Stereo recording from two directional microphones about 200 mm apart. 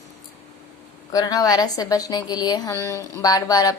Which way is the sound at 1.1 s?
20° left (ahead or behind).